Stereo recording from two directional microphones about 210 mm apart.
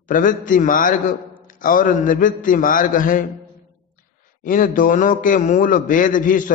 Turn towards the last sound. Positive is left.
turn(degrees=40)  # may be behind; listen again after turning